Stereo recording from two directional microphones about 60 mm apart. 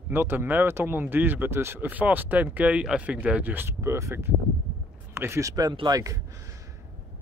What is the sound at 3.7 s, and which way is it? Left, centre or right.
Speech, right.